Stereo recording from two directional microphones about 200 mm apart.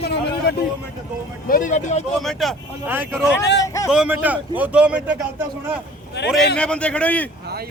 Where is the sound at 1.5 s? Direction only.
40° left (ahead or behind).